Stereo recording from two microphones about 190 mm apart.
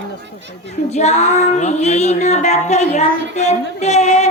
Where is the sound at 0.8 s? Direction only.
35° left (ahead or behind).